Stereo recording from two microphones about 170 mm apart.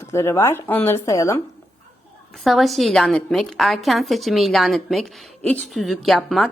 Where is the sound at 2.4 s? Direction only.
Centre (ahead or behind).